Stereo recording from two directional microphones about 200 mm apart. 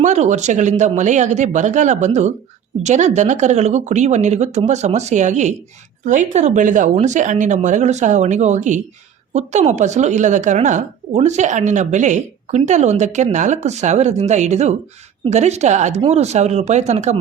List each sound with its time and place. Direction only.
0.0 s a woman's voice: 35° right (ahead or behind)